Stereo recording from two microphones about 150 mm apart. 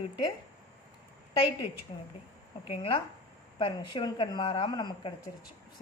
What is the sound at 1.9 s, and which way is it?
Speech, 40° left (ahead or behind).